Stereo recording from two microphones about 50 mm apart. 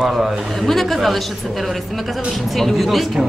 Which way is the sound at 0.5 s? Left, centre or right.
Centre.